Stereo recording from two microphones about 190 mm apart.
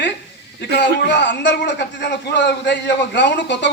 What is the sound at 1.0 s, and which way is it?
A man's voice, 70° left (ahead or behind).